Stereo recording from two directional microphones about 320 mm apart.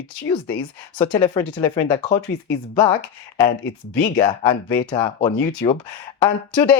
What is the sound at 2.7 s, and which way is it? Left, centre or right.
Speech, centre.